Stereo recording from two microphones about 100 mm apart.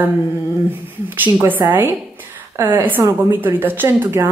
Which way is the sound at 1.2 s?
25° right (ahead or behind).